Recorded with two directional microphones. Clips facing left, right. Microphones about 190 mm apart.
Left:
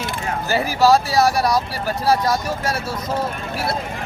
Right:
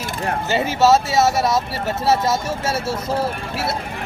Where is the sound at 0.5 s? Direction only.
25° right (ahead or behind).